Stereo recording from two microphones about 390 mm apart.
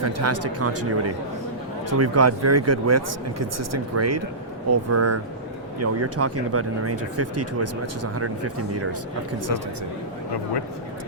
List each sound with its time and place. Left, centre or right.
0.0 s speech: right